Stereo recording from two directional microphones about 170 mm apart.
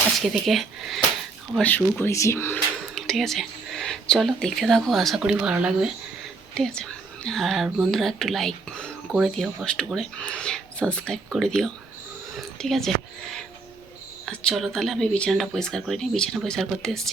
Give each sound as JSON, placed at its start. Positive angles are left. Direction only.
{"t": 0.2, "sound": "speech", "side_deg": 0}
{"t": 2.9, "sound": "speech", "side_deg": 0}
{"t": 14.3, "sound": "speech", "side_deg": 0}